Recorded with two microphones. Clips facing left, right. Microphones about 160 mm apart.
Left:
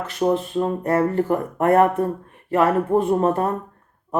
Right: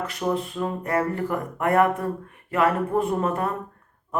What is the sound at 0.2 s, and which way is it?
Speech, 30° left (ahead or behind).